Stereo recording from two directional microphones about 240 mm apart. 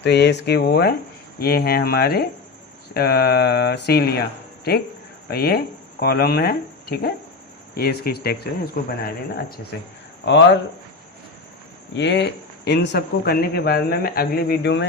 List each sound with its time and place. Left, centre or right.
0.0 s a man's voice: left
11.9 s a man's voice: left